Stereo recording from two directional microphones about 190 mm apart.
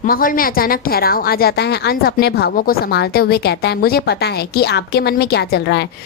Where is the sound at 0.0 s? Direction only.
45° left (ahead or behind).